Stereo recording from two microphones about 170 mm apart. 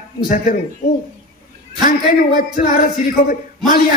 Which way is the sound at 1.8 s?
55° left (ahead or behind).